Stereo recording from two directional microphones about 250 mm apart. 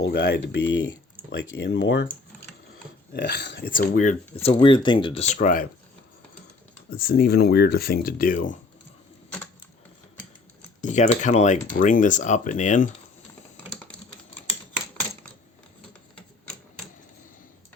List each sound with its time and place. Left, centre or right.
0.0 s speech: left
3.1 s speech: left
6.9 s speech: left
10.8 s speech: left